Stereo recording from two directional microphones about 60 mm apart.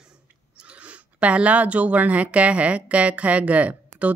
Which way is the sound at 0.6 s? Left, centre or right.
Right.